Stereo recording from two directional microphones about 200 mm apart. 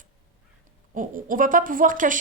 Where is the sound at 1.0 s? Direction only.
40° right (ahead or behind).